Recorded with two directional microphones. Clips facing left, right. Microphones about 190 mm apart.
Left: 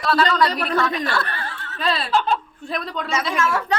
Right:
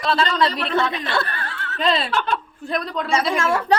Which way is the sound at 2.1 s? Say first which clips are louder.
Left 3 dB; 65° right (ahead or behind).